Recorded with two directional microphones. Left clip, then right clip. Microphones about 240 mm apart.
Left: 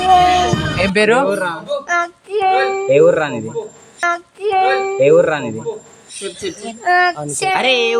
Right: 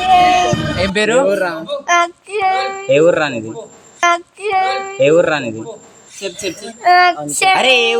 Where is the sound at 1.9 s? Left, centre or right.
Right.